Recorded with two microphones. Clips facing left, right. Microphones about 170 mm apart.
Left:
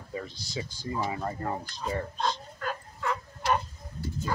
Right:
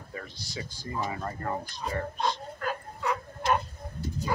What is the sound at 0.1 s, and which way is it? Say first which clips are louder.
Speech: left 4 dB; 20° left (ahead or behind).